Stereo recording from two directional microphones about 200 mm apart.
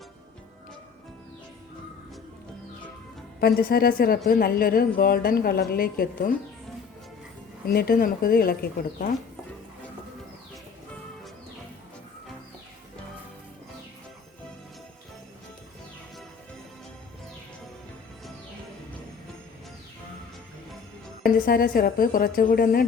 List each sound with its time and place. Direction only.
3.4 s a woman's voice: 50° left (ahead or behind)
7.7 s a woman's voice: 50° left (ahead or behind)
21.2 s a woman's voice: 45° left (ahead or behind)